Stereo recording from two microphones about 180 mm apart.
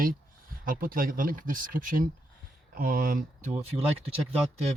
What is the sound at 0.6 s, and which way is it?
Speech, 55° right (ahead or behind).